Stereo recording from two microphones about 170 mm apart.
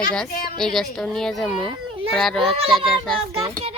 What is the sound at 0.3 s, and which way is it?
Speech, 65° left (ahead or behind).